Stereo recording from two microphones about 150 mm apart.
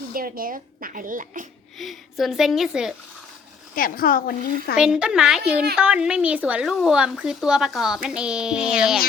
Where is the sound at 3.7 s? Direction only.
70° left (ahead or behind).